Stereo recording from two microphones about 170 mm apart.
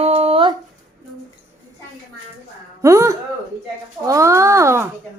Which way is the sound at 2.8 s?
20° right (ahead or behind).